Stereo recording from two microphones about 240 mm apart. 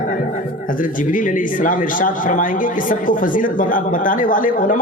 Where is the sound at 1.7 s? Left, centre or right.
Left.